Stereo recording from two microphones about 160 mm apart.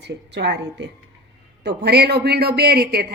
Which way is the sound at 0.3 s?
90° right.